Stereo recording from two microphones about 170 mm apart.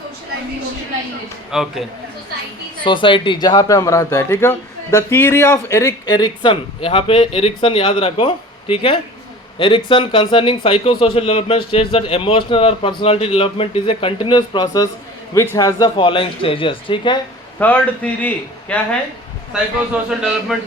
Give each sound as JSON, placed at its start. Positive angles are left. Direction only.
{"t": 1.5, "sound": "speech", "side_deg": -5}
{"t": 2.8, "sound": "a man's voice", "side_deg": 30}
{"t": 17.6, "sound": "a man's voice", "side_deg": 10}
{"t": 19.9, "sound": "speech", "side_deg": -5}